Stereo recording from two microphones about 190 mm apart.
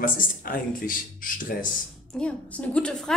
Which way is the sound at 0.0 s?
45° left (ahead or behind).